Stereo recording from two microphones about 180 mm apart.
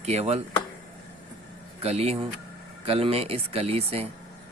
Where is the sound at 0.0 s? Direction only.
35° right (ahead or behind).